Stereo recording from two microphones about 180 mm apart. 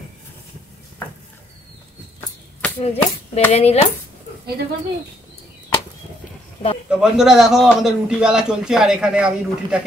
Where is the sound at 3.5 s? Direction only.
35° left (ahead or behind).